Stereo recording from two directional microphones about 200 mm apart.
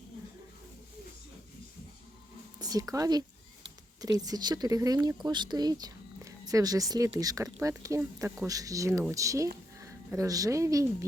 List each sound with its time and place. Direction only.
2.6 s speech: 20° right (ahead or behind)